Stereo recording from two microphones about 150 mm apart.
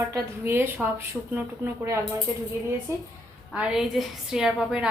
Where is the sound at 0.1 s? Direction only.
15° right (ahead or behind).